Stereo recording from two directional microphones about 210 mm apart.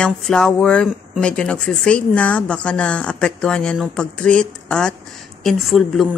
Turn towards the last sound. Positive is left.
turn(degrees=0)  # may be behind; listen again after turning